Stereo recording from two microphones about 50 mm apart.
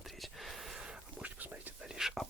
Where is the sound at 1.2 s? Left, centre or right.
Right.